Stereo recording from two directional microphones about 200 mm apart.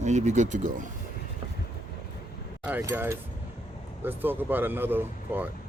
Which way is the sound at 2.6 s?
10° right (ahead or behind).